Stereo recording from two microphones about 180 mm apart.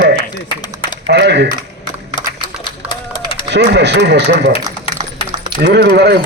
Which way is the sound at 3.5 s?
70° right (ahead or behind).